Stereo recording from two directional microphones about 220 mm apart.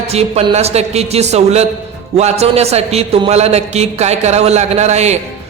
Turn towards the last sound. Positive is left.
turn(degrees=-30)  # may be behind; listen again after turning